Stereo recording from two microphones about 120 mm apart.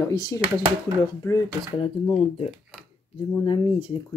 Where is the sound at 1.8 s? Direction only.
55° left (ahead or behind).